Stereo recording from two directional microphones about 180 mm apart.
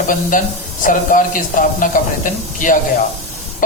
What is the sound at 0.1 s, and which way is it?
A man's voice, 45° left (ahead or behind).